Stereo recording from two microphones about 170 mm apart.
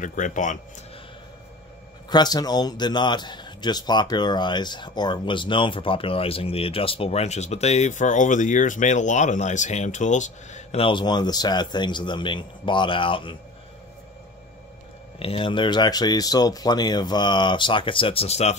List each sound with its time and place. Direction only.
0.0 s speech: 45° left (ahead or behind)
2.0 s speech: 25° left (ahead or behind)
15.1 s speech: 30° left (ahead or behind)